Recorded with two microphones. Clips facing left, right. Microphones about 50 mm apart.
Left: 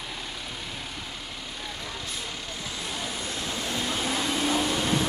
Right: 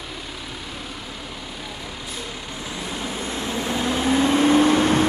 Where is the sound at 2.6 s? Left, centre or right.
Right.